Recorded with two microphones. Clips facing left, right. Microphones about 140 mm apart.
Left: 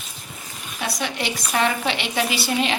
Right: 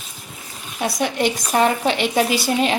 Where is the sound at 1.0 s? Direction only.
50° right (ahead or behind).